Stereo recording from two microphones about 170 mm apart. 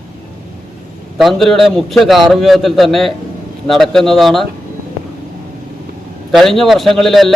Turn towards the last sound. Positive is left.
turn(degrees=0)  # may be behind; listen again after turning